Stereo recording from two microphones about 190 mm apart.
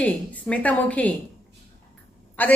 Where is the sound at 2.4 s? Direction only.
10° left (ahead or behind).